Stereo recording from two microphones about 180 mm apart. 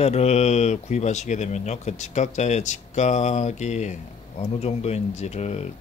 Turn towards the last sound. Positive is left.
turn(degrees=35)  # may be behind; listen again after turning